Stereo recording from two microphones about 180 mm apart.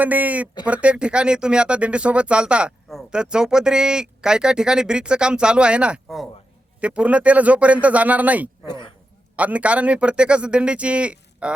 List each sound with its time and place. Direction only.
0.0 s speech: 10° right (ahead or behind)
8.6 s speech: 25° left (ahead or behind)
9.3 s speech: 5° right (ahead or behind)